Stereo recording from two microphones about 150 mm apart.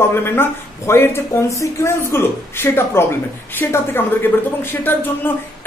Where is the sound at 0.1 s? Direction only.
15° left (ahead or behind).